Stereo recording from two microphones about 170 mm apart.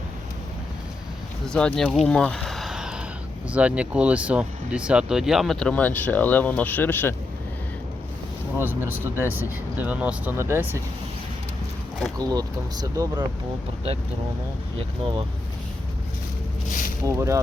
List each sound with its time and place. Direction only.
1.5 s speech: 5° left (ahead or behind)
8.5 s speech: 15° right (ahead or behind)
12.3 s speech: 20° right (ahead or behind)
17.0 s speech: 15° right (ahead or behind)